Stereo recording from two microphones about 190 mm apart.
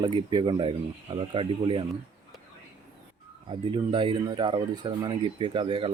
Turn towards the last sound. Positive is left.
turn(degrees=-25)  # may be behind; listen again after turning